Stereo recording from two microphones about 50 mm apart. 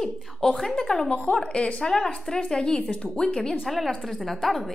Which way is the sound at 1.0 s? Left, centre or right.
Centre.